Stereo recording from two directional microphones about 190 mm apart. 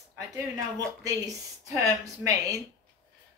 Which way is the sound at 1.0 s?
15° right (ahead or behind).